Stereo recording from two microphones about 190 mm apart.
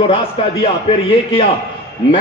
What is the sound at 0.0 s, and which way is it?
Speech, 30° left (ahead or behind).